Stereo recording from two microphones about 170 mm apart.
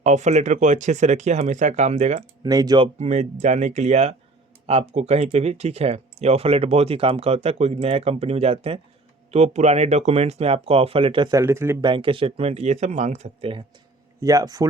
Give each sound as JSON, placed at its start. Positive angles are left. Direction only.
{"t": 0.0, "sound": "speech", "side_deg": -45}
{"t": 2.4, "sound": "speech", "side_deg": -20}
{"t": 2.8, "sound": "speech", "side_deg": -40}
{"t": 11.8, "sound": "speech", "side_deg": -30}
{"t": 14.2, "sound": "speech", "side_deg": -20}